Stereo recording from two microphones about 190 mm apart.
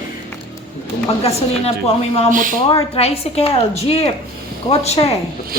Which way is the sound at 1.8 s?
35° left (ahead or behind).